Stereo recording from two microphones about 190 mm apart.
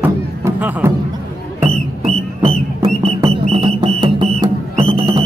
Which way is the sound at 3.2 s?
25° right (ahead or behind).